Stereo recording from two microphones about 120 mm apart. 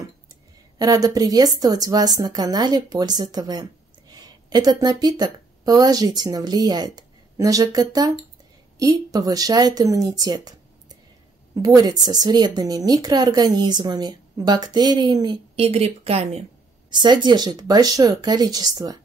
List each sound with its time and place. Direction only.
0.7 s speech: 30° right (ahead or behind)
11.6 s speech: 30° right (ahead or behind)
15.5 s speech: 55° right (ahead or behind)
16.9 s speech: 40° right (ahead or behind)